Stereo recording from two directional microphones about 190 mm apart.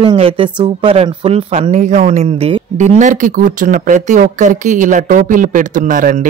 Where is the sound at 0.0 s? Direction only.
30° right (ahead or behind).